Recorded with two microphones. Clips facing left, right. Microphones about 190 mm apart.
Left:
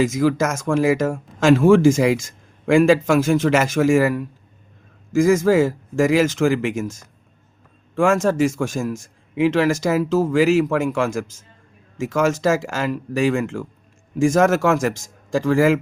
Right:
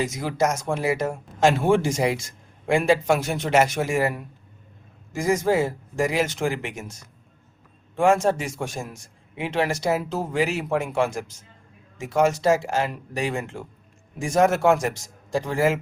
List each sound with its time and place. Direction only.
0.2 s speech: 90° left
7.9 s speech: 90° left